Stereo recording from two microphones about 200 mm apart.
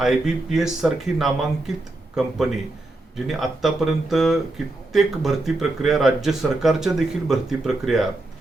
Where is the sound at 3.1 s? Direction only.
Centre (ahead or behind).